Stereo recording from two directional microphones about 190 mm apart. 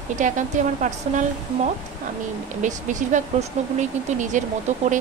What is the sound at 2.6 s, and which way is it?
Speech, 40° right (ahead or behind).